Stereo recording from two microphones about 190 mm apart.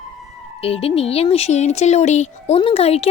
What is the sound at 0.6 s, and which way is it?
A woman's voice, 30° left (ahead or behind).